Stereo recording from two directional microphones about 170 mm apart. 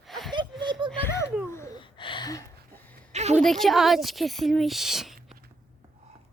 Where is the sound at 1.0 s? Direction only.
15° left (ahead or behind).